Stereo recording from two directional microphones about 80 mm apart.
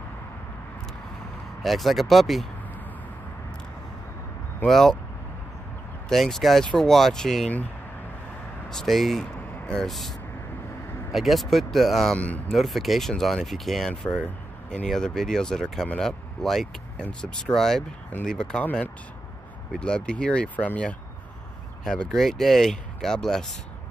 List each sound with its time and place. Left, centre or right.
1.6 s speech: centre
4.6 s speech: centre
6.0 s speech: centre
8.6 s speech: centre
12.2 s speech: centre
12.4 s speech: centre